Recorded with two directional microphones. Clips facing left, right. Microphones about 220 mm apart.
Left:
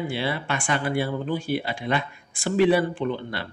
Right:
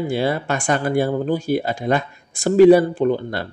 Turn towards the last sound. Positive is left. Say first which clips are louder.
# right 8 dB
turn(degrees=-45)  # may be behind; listen again after turning